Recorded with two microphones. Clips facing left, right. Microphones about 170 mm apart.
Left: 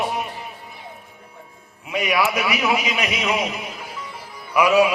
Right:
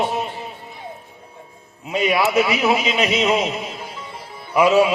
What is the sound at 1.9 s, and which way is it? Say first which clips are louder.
A man's voice: right 3 dB; 25° right (ahead or behind).